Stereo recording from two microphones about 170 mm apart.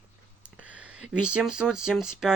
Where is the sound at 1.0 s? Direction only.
5° right (ahead or behind).